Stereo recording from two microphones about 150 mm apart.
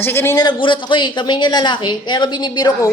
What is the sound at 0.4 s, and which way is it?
A woman's voice, 30° left (ahead or behind).